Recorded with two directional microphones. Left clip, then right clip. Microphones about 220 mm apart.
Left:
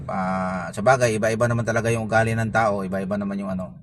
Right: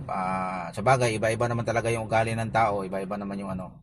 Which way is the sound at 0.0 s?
25° left (ahead or behind).